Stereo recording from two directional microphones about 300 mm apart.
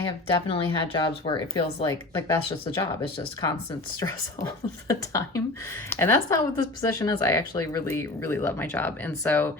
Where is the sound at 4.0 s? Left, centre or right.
Centre.